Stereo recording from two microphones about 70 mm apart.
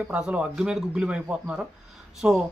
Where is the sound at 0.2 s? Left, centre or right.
Centre.